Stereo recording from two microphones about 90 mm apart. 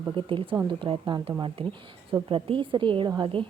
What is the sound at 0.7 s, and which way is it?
Speech, 65° right (ahead or behind).